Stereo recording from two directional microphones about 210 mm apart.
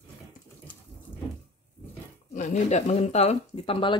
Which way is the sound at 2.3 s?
35° left (ahead or behind).